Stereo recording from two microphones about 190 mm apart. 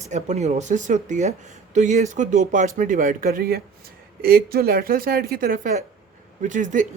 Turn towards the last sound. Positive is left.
turn(degrees=-40)  # may be behind; listen again after turning